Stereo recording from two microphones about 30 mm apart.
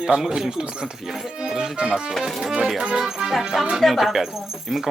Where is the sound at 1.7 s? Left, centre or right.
Right.